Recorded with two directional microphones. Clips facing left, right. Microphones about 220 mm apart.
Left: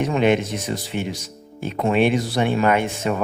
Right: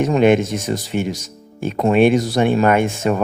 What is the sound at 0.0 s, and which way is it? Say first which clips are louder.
Speech: right 5 dB; 45° right (ahead or behind).